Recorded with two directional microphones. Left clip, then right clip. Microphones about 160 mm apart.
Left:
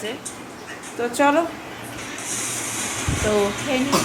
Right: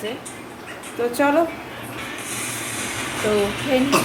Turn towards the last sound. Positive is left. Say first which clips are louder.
# right 1 dB
turn(degrees=0)  # may be behind; listen again after turning